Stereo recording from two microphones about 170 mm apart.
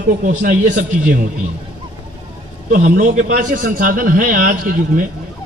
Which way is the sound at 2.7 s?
50° right (ahead or behind).